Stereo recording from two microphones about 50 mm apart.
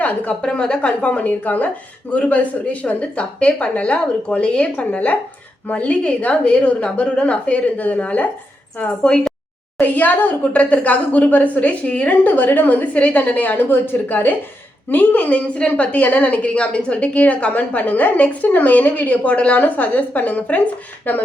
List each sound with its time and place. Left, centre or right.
0.0 s a woman's voice: left
4.8 s a woman's voice: left
9.7 s a woman's voice: left